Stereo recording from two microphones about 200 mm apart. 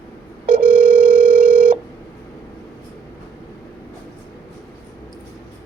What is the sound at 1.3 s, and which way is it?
Telephone, 45° right (ahead or behind).